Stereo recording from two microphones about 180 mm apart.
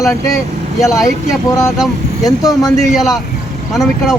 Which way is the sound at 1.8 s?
Centre (ahead or behind).